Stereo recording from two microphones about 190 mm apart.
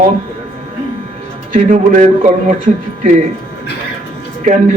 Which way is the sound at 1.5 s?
40° right (ahead or behind).